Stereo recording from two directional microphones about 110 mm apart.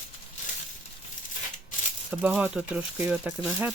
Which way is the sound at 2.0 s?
15° right (ahead or behind).